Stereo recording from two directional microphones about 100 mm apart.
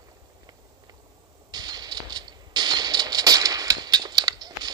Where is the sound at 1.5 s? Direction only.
45° right (ahead or behind).